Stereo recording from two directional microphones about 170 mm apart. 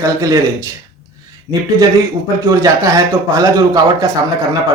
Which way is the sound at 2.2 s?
20° right (ahead or behind).